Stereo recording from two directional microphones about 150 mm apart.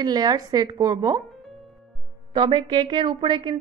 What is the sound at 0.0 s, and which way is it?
A woman's voice, 25° right (ahead or behind).